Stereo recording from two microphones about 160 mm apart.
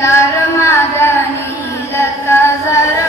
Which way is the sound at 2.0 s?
15° left (ahead or behind).